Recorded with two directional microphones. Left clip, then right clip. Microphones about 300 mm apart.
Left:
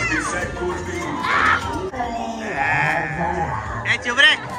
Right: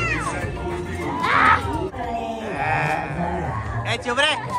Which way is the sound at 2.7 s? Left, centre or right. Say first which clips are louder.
Left 3 dB; centre.